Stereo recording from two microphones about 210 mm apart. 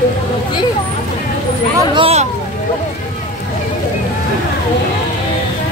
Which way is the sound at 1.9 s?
25° right (ahead or behind).